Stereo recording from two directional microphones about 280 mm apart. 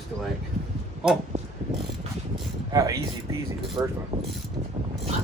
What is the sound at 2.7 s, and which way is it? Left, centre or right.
Speech, centre.